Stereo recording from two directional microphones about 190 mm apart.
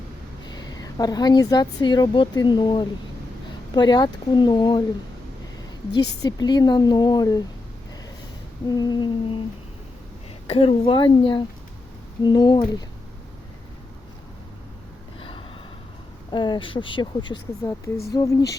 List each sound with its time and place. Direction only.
0.4 s speech: 20° left (ahead or behind)
6.2 s speech: 20° left (ahead or behind)
8.6 s speech: 20° left (ahead or behind)
10.4 s speech: 30° left (ahead or behind)
15.2 s gasp: 25° left (ahead or behind)
16.3 s speech: 25° left (ahead or behind)